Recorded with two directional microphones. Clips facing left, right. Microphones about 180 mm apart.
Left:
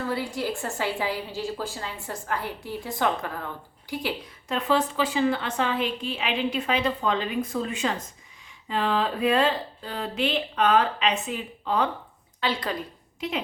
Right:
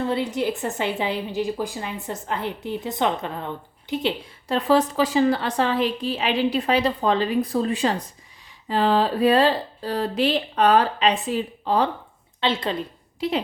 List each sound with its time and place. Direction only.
0.0 s a woman's voice: 20° right (ahead or behind)
4.4 s a woman's voice: 35° right (ahead or behind)